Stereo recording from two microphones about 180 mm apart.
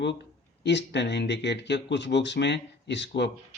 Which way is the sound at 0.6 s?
75° left (ahead or behind).